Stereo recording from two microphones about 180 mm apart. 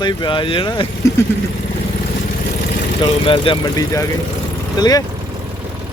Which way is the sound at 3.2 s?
30° left (ahead or behind).